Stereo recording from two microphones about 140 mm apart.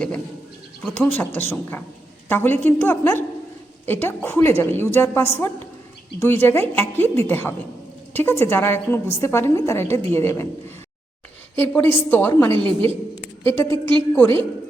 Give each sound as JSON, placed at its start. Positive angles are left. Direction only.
{"t": 0.9, "sound": "a woman's voice", "side_deg": 15}
{"t": 11.5, "sound": "a woman's voice", "side_deg": 15}